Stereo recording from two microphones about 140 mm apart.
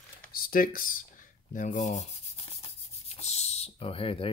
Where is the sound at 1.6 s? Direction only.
65° left (ahead or behind).